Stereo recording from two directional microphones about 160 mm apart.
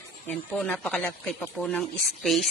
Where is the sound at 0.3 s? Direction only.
5° left (ahead or behind).